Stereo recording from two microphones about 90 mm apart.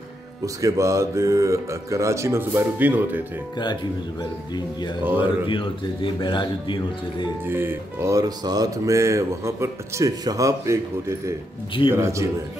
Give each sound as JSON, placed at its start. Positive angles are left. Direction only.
{"t": 0.6, "sound": "speech", "side_deg": -35}
{"t": 5.2, "sound": "speech", "side_deg": 70}
{"t": 7.4, "sound": "speech", "side_deg": -25}